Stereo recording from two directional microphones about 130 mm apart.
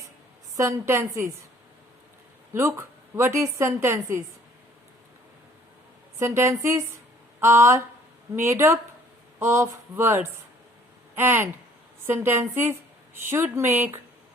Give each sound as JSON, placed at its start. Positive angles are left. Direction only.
{"t": 0.5, "sound": "a woman's voice", "side_deg": -25}
{"t": 2.5, "sound": "a woman's voice", "side_deg": -20}
{"t": 6.1, "sound": "a woman's voice", "side_deg": -20}
{"t": 7.3, "sound": "a sound", "side_deg": -20}
{"t": 8.4, "sound": "a woman's voice", "side_deg": -20}